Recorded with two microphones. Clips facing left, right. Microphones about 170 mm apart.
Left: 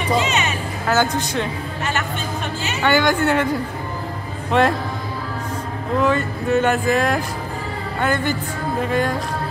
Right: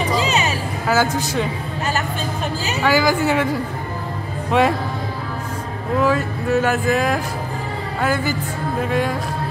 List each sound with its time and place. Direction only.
0.2 s a sound: 35° right (ahead or behind)
0.8 s speech: 5° right (ahead or behind)
2.8 s speech: centre (ahead or behind)
5.9 s speech: centre (ahead or behind)